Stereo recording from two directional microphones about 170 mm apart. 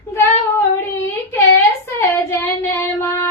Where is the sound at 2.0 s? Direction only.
15° left (ahead or behind).